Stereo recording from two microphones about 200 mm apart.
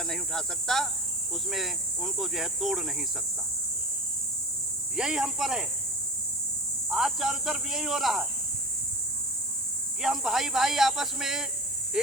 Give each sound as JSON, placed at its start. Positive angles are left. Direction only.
{"t": 0.0, "sound": "speech", "side_deg": 0}
{"t": 4.9, "sound": "speech", "side_deg": -5}
{"t": 6.9, "sound": "speech", "side_deg": 0}
{"t": 10.0, "sound": "speech", "side_deg": 0}